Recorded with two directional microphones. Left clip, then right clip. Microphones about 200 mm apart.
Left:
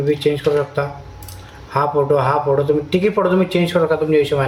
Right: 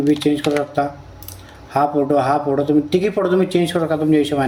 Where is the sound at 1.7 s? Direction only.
35° right (ahead or behind).